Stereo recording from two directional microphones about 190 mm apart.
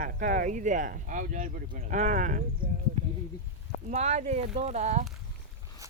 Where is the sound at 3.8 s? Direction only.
35° right (ahead or behind).